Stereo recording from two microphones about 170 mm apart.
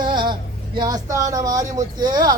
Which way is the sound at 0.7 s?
20° right (ahead or behind).